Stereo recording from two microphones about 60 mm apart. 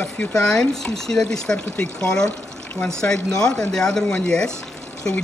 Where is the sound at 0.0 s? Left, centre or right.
Centre.